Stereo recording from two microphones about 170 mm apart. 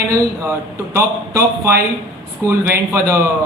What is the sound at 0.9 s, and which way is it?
Speech, 15° right (ahead or behind).